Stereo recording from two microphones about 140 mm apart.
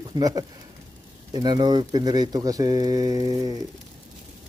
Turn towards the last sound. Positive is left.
turn(degrees=-25)  # may be behind; listen again after turning